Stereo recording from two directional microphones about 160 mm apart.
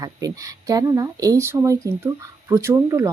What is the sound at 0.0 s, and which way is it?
Speech, 20° right (ahead or behind).